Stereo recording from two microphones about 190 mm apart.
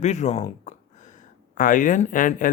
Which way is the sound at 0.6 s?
40° left (ahead or behind).